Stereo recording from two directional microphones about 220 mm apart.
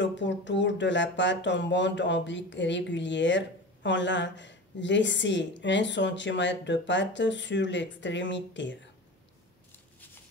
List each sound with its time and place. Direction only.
0.0 s speech: 55° left (ahead or behind)